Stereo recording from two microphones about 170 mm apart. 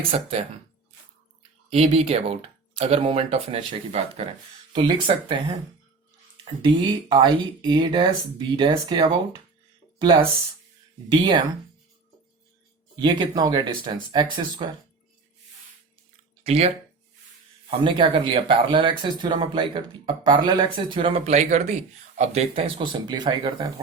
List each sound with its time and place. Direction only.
0.1 s speech: 35° right (ahead or behind)
1.7 s speech: 35° right (ahead or behind)
11.1 s speech: 30° right (ahead or behind)
13.0 s speech: 25° right (ahead or behind)
16.4 s speech: 35° right (ahead or behind)
21.2 s speech: 45° right (ahead or behind); by 23.8 s 30° right (ahead or behind)